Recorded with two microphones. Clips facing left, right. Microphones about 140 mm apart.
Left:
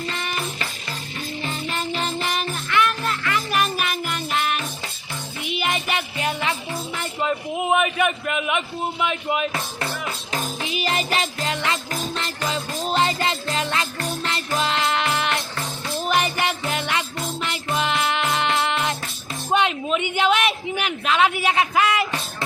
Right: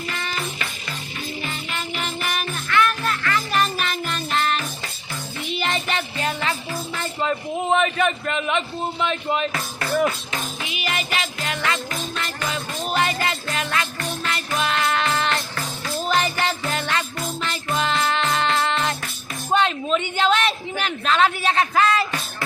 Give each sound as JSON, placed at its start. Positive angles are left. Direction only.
{"t": 0.1, "sound": "music", "side_deg": 20}
{"t": 1.7, "sound": "music", "side_deg": 35}
{"t": 3.5, "sound": "music", "side_deg": 10}
{"t": 9.5, "sound": "speech", "side_deg": 25}
{"t": 10.6, "sound": "music", "side_deg": 35}
{"t": 11.3, "sound": "music", "side_deg": 25}
{"t": 19.5, "sound": "a sound", "side_deg": 15}